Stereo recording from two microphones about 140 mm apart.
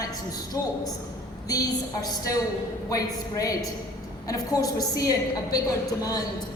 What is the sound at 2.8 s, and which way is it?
A woman's voice, 25° left (ahead or behind).